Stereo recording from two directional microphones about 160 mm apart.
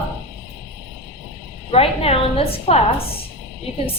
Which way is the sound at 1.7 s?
40° left (ahead or behind).